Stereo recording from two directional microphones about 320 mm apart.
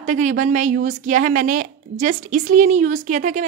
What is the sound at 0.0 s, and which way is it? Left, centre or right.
Speech, right.